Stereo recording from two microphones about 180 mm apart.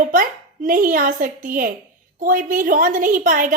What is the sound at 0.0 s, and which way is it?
A woman's voice, 45° right (ahead or behind).